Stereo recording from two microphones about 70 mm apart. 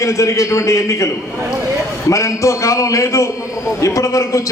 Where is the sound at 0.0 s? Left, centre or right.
Left.